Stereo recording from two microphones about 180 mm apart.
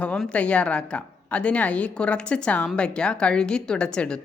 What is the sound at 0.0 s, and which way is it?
A woman's voice, 5° left (ahead or behind).